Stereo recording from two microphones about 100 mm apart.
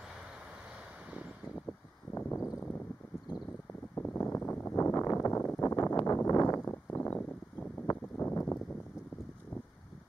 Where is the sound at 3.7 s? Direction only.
25° left (ahead or behind).